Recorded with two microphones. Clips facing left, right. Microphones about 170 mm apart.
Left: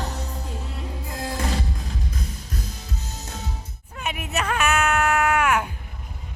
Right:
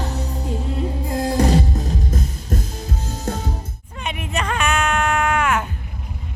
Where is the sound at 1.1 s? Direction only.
40° right (ahead or behind).